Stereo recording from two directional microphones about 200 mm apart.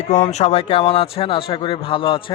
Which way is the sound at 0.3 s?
35° left (ahead or behind).